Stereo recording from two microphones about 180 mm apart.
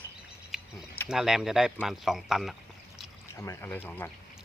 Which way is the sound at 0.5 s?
5° right (ahead or behind).